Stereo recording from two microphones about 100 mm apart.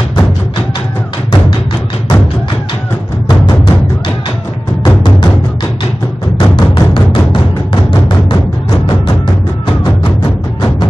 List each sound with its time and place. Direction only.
4.8 s music: 45° left (ahead or behind)
6.3 s music: 50° left (ahead or behind)